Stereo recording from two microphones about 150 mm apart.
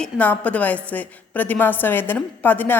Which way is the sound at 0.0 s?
10° left (ahead or behind).